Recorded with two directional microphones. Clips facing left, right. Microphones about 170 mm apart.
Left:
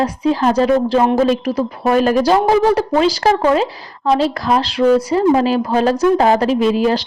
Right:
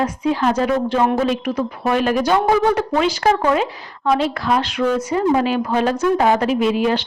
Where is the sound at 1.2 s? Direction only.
35° left (ahead or behind).